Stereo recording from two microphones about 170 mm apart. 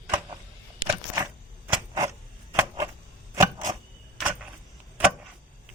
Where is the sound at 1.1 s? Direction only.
20° right (ahead or behind).